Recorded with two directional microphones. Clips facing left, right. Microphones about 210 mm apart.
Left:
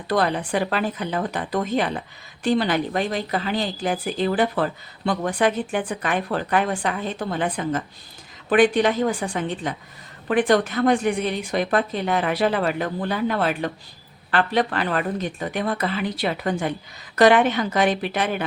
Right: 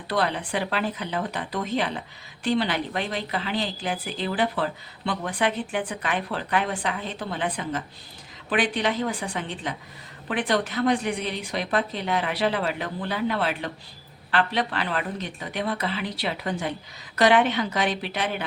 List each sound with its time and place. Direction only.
0.1 s a woman's voice: 45° left (ahead or behind)